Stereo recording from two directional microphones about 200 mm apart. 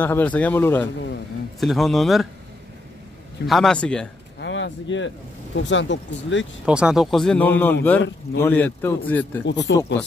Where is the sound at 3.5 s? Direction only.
5° left (ahead or behind).